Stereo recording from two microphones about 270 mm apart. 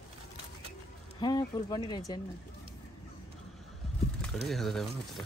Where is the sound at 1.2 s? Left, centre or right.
Centre.